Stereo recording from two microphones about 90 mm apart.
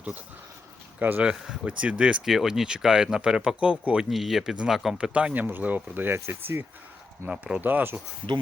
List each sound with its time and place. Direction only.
0.9 s speech: 15° right (ahead or behind)
4.1 s speech: centre (ahead or behind); by 6.7 s 25° right (ahead or behind)
7.3 s speech: 10° right (ahead or behind)
7.6 s speech: 20° right (ahead or behind)